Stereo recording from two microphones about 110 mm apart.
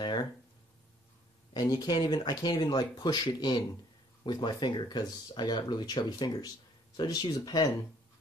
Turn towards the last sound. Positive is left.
turn(degrees=35)  # may be behind; listen again after turning